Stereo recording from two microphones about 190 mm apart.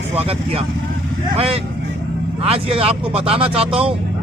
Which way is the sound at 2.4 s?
30° right (ahead or behind).